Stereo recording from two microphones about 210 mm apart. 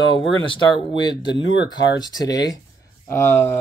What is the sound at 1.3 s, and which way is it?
Speech, 60° left (ahead or behind).